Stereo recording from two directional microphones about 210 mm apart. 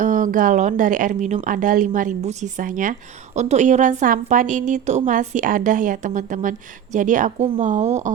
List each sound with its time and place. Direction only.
0.0 s a woman's voice: 40° right (ahead or behind)